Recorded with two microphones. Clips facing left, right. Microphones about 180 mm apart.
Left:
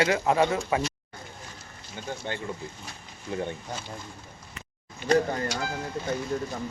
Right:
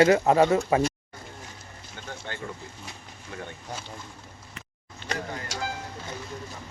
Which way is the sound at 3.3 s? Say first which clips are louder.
Left 8 dB; 20° left (ahead or behind).